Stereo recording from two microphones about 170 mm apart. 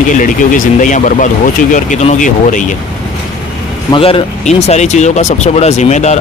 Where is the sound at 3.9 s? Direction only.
35° left (ahead or behind).